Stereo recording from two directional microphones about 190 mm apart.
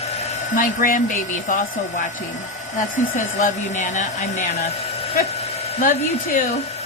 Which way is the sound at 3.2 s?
40° left (ahead or behind).